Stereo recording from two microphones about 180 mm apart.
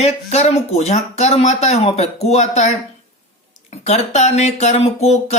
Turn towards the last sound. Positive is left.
turn(degrees=35)  # may be behind; listen again after turning